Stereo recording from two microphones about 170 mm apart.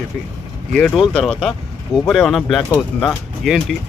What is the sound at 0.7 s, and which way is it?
Speech, centre (ahead or behind).